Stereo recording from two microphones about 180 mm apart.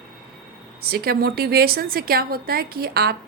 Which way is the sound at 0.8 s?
60° right (ahead or behind).